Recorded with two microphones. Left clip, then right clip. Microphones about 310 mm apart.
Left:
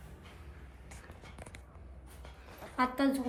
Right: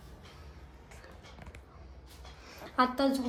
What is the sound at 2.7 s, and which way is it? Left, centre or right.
Speech, centre.